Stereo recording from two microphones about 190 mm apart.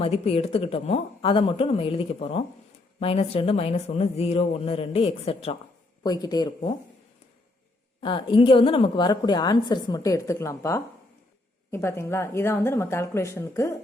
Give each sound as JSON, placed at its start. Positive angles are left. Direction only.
{"t": 0.0, "sound": "a woman's voice", "side_deg": 30}
{"t": 6.0, "sound": "a woman's voice", "side_deg": 20}
{"t": 8.0, "sound": "a woman's voice", "side_deg": 25}